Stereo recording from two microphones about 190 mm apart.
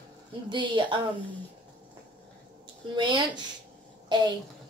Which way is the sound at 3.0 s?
25° right (ahead or behind).